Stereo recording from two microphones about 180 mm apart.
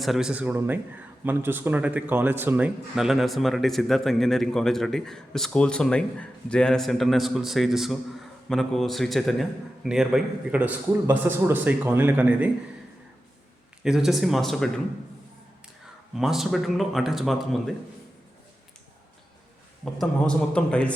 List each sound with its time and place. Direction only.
0.0 s a man's voice: centre (ahead or behind)
13.8 s speech: 5° right (ahead or behind)
16.1 s speech: centre (ahead or behind)
19.8 s speech: 5° left (ahead or behind)